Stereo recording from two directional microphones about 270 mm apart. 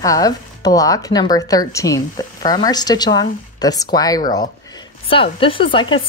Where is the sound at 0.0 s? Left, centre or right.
Centre.